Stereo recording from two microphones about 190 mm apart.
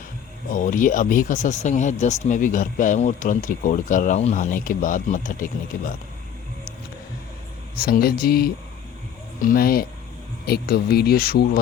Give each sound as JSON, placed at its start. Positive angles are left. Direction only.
{"t": 0.5, "sound": "speech", "side_deg": 45}
{"t": 7.8, "sound": "speech", "side_deg": 50}